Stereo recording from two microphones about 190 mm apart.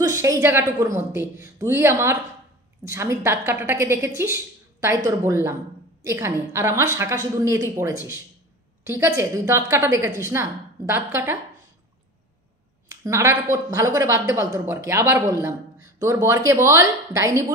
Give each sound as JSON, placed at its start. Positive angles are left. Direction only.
{"t": 0.0, "sound": "a woman's voice", "side_deg": -15}
{"t": 13.0, "sound": "a woman's voice", "side_deg": -15}